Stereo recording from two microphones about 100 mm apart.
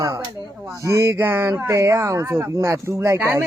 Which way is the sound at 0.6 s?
30° right (ahead or behind).